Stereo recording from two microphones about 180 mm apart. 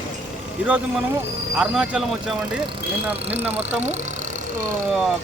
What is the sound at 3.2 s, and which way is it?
Speech, 35° right (ahead or behind).